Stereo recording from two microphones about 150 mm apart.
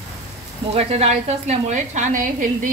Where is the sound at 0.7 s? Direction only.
45° right (ahead or behind).